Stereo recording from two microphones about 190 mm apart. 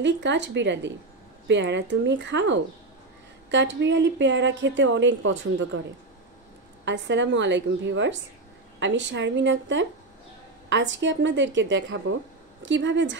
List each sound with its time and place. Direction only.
0.0 s a woman's voice: 70° right (ahead or behind)
6.8 s a woman's voice: 70° right (ahead or behind)
12.6 s a woman's voice: 70° right (ahead or behind)